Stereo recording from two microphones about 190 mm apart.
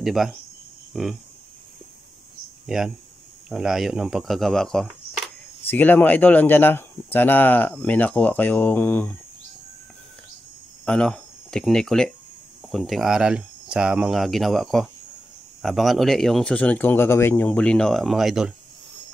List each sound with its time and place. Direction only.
0.0 s speech: centre (ahead or behind)
2.6 s speech: centre (ahead or behind)
10.9 s speech: 5° left (ahead or behind)